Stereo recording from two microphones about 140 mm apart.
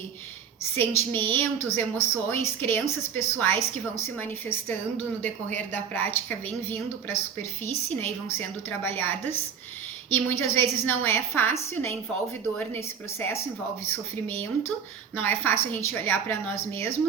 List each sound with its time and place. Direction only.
0.6 s a woman's voice: 15° left (ahead or behind)
15.2 s a woman's voice: 15° left (ahead or behind)